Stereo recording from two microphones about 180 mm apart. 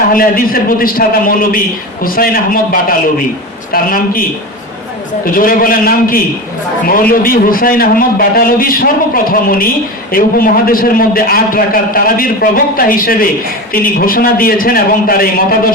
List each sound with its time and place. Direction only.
0.1 s a man's voice: 55° left (ahead or behind)
3.7 s a man's voice: 50° left (ahead or behind)
5.2 s a man's voice: 50° left (ahead or behind)